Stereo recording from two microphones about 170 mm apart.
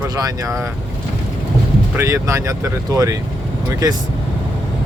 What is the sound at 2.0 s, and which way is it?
Speech, 15° right (ahead or behind).